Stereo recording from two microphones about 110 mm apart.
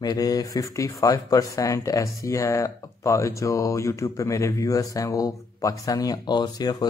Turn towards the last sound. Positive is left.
turn(degrees=35)  # may be behind; listen again after turning